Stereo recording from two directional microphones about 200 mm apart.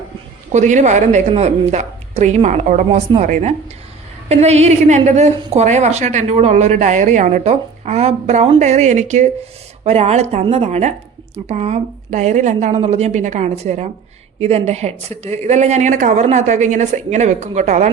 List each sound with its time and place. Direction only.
0.5 s a woman's voice: 35° right (ahead or behind)